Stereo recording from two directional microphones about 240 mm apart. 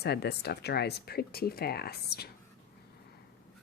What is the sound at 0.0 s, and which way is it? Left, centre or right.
Speech, left.